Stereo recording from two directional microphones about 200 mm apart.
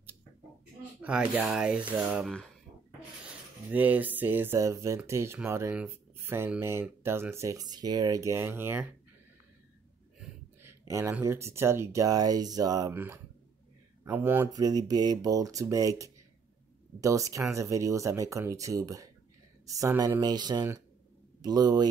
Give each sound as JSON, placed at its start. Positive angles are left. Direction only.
{"t": 1.0, "sound": "speech", "side_deg": -5}
{"t": 3.7, "sound": "speech", "side_deg": -10}
{"t": 10.2, "sound": "a sound", "side_deg": -10}
{"t": 11.2, "sound": "speech", "side_deg": -15}